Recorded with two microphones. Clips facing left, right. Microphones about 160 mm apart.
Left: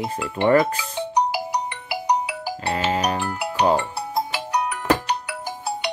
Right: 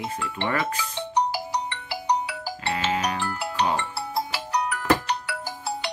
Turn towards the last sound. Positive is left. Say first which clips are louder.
# left 3 dB
turn(degrees=20)  # may be behind; listen again after turning